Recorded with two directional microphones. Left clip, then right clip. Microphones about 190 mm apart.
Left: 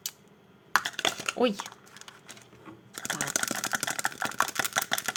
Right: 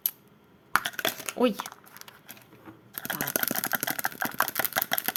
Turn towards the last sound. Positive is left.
turn(degrees=-5)  # may be behind; listen again after turning